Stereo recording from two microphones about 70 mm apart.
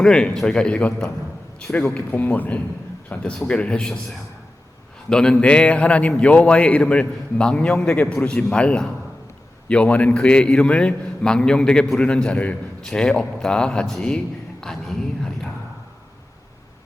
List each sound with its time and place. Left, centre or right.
0.0 s a man's voice: centre
5.0 s a man's voice: centre